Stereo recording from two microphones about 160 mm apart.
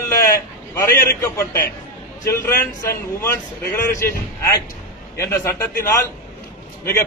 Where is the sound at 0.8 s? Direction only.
15° left (ahead or behind).